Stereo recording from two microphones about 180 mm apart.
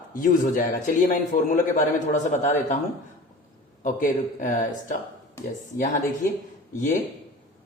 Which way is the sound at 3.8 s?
45° left (ahead or behind).